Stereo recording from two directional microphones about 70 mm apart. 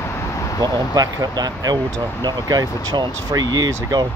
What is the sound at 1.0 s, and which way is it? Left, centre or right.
Speech, right.